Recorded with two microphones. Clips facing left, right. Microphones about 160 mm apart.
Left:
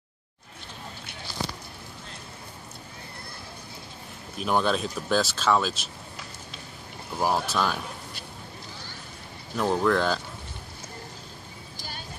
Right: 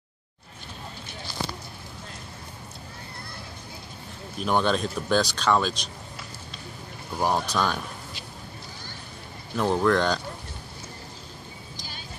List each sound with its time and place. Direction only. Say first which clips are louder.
4.4 s speech: right 1 dB; centre (ahead or behind)
7.2 s speech: right 1 dB; 5° left (ahead or behind)
9.6 s speech: right 1 dB; centre (ahead or behind)